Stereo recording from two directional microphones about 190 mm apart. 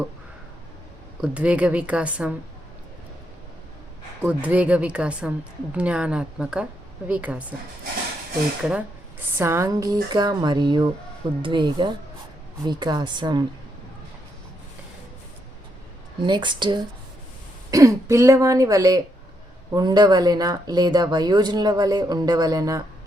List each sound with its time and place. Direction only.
1.2 s speech: 5° right (ahead or behind)
4.2 s a woman's voice: 5° right (ahead or behind)
8.6 s speech: 10° right (ahead or behind)
16.2 s speech: 25° right (ahead or behind)